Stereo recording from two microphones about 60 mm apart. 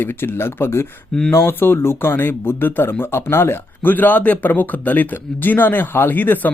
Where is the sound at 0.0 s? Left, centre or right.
Left.